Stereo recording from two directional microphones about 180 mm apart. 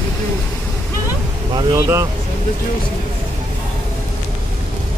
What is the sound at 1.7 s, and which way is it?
Vehicle, 15° right (ahead or behind).